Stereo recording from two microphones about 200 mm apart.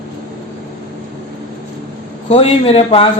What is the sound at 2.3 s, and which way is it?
Speech, 30° left (ahead or behind).